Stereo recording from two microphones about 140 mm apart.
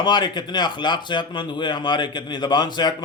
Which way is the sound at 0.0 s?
30° left (ahead or behind).